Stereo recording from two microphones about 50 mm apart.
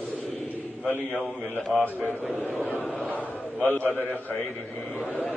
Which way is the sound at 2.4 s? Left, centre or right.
Left.